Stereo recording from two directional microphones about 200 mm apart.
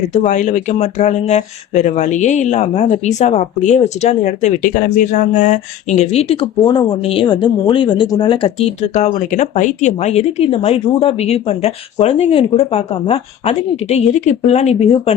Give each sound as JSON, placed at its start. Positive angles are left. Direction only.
{"t": 0.1, "sound": "speech", "side_deg": 35}